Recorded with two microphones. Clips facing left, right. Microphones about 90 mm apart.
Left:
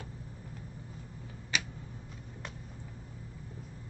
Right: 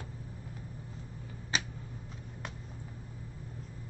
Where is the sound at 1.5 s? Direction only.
35° right (ahead or behind).